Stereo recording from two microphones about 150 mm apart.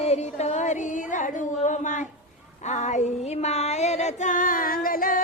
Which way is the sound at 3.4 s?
45° left (ahead or behind).